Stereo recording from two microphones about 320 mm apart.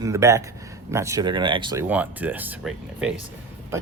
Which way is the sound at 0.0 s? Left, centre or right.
Centre.